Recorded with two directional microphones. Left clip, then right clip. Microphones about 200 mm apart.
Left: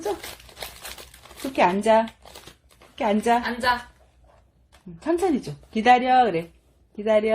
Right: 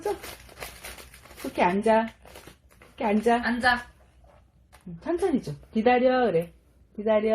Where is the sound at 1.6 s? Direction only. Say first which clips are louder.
Left 4 dB; 25° left (ahead or behind).